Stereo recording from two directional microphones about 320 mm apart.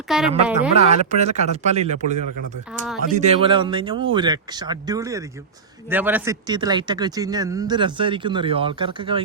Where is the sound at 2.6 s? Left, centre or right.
Centre.